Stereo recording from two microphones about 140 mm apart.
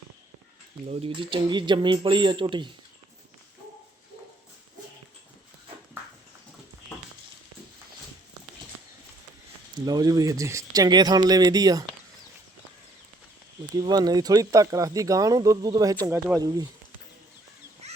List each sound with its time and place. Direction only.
0.9 s speech: 40° right (ahead or behind)
9.7 s speech: 30° right (ahead or behind)
13.8 s speech: 30° right (ahead or behind)
17.8 s a sound: 50° right (ahead or behind)